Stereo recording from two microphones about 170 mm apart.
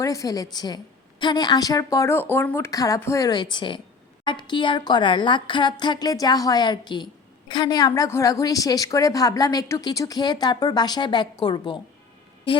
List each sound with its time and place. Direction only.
0.0 s a woman's voice: 20° left (ahead or behind)